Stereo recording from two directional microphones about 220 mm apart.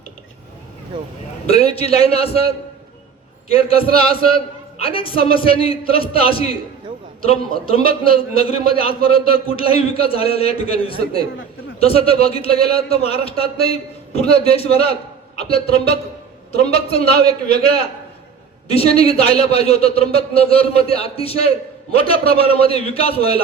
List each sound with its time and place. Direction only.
1.5 s a man's voice: 30° left (ahead or behind)
3.5 s a man's voice: 25° left (ahead or behind)
7.6 s a man's voice: 25° left (ahead or behind)